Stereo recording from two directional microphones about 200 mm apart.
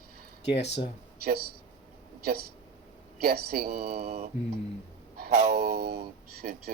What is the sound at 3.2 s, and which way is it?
Speech, 50° right (ahead or behind).